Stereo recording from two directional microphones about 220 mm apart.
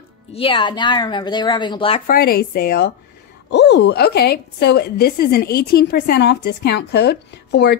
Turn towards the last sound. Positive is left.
turn(degrees=50)  # may be behind; listen again after turning